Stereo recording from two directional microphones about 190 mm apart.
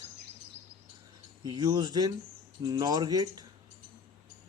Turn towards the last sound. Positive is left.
turn(degrees=-20)  # may be behind; listen again after turning